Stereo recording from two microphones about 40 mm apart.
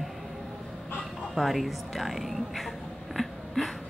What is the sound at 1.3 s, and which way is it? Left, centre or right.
Speech, centre.